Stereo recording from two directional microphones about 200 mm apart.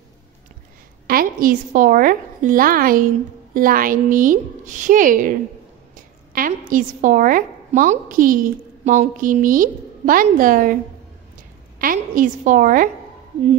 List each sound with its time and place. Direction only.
1.0 s a woman's voice: 45° right (ahead or behind)
11.8 s a woman's voice: 45° right (ahead or behind)